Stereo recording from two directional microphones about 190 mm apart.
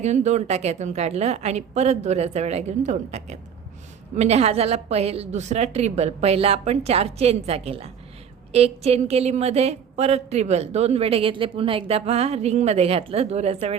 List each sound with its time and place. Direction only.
0.0 s a woman's voice: 35° right (ahead or behind)